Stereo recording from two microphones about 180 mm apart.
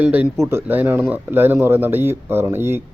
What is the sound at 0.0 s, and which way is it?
Speech, 10° right (ahead or behind).